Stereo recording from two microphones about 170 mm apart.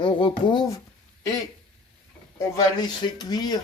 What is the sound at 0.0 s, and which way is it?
Speech, 30° left (ahead or behind).